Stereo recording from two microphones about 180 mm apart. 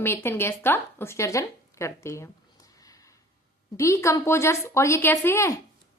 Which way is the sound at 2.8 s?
20° left (ahead or behind).